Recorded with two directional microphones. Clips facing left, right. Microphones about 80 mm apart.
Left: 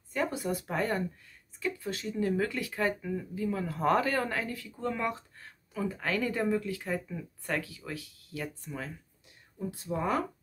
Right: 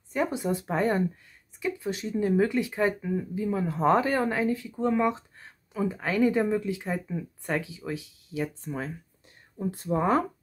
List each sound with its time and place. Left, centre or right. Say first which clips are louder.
0.1 s speech: right 4 dB; right
9.6 s speech: right 6 dB; right